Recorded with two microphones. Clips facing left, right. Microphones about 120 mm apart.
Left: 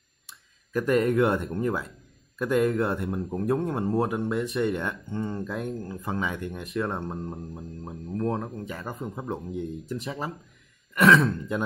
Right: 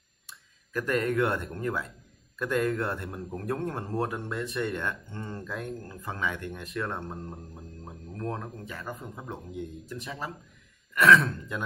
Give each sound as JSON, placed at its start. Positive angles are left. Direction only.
{"t": 0.7, "sound": "a man's voice", "side_deg": 15}